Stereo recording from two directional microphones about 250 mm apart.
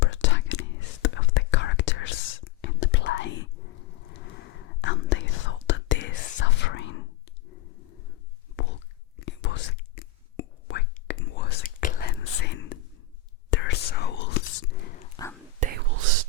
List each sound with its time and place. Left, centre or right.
0.0 s whispering: left
8.5 s whispering: left
15.1 s whispering: centre
15.6 s whispering: right